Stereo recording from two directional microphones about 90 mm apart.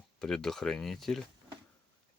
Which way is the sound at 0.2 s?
5° left (ahead or behind).